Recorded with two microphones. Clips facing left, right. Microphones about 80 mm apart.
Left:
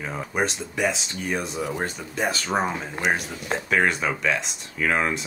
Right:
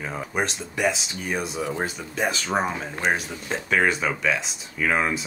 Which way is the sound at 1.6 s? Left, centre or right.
Centre.